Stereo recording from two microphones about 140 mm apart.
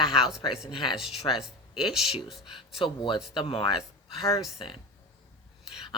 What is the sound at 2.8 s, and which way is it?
Speech, 35° left (ahead or behind).